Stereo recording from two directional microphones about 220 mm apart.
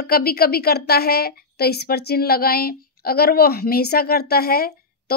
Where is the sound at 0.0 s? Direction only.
45° left (ahead or behind).